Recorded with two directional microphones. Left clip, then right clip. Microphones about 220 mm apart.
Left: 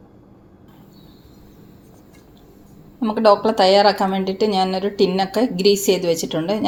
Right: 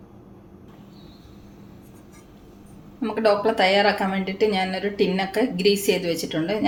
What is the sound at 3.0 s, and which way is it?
Speech, 25° left (ahead or behind).